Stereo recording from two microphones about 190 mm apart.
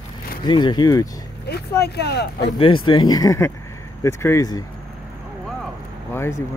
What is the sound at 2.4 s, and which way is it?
Speech, 25° left (ahead or behind).